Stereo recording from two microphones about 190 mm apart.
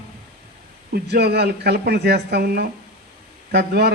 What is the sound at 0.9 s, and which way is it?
A man's voice, 60° right (ahead or behind).